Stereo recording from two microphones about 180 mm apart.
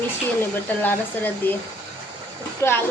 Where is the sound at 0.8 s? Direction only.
10° left (ahead or behind).